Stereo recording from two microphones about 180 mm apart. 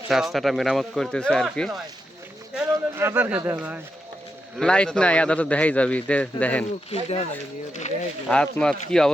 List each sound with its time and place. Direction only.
0.1 s speech: centre (ahead or behind)
2.6 s speech: 10° right (ahead or behind)
4.5 s a man's voice: 5° left (ahead or behind)
6.9 s speech: 35° left (ahead or behind)
8.3 s speech: 5° left (ahead or behind)